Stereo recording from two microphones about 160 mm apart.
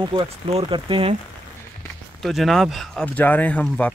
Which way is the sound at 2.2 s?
Centre (ahead or behind).